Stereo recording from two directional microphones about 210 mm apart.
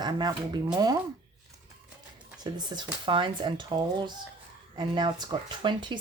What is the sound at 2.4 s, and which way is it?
Speech, 20° right (ahead or behind).